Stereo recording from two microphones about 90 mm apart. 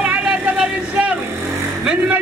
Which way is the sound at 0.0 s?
15° right (ahead or behind).